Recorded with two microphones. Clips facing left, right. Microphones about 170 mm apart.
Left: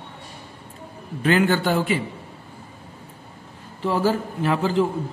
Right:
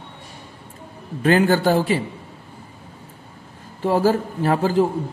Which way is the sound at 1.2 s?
40° right (ahead or behind).